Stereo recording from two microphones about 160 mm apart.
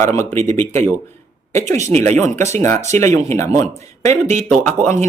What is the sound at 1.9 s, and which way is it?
Speech, 45° right (ahead or behind).